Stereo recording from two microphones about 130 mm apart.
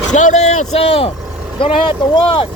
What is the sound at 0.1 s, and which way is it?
Speech, 70° left (ahead or behind).